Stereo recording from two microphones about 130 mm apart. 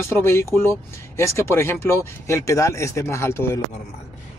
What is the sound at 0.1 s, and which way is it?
Speech, 20° left (ahead or behind).